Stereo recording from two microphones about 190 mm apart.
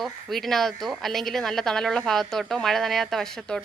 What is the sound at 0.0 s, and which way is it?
A woman's voice, centre (ahead or behind).